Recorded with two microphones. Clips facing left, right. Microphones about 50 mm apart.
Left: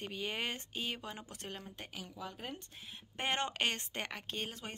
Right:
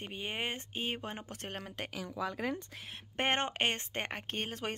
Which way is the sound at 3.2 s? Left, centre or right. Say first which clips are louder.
Right 3 dB; right.